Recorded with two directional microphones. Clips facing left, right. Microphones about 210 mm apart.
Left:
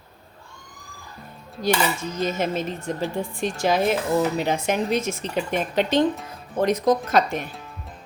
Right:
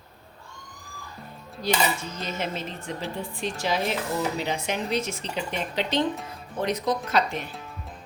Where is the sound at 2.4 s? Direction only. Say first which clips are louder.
Left 6 dB; 45° left (ahead or behind).